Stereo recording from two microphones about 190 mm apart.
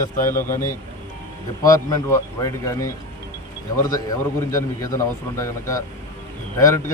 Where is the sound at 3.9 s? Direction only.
15° left (ahead or behind).